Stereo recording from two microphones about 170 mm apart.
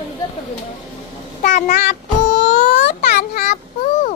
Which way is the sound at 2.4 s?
90° left.